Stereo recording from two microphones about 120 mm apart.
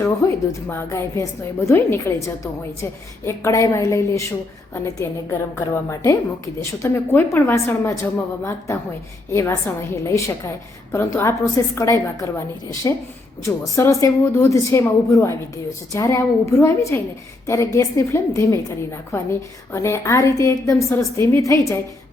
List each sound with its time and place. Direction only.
0.0 s a woman's voice: 20° left (ahead or behind)